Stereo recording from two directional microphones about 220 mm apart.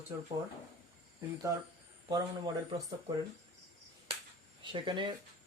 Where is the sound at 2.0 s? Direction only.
15° right (ahead or behind).